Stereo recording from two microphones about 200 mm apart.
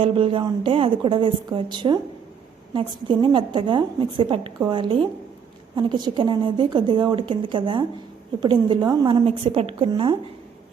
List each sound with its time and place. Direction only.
0.0 s a woman's voice: 25° right (ahead or behind)